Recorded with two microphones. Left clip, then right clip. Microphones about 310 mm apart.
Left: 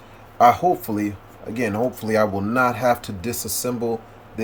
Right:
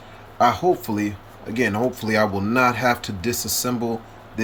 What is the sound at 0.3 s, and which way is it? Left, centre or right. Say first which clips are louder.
Speech: left 3 dB; centre.